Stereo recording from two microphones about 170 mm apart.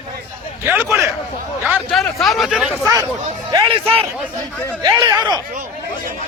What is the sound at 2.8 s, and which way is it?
Speech, 20° right (ahead or behind).